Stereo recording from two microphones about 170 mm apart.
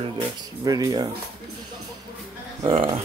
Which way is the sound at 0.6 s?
20° right (ahead or behind).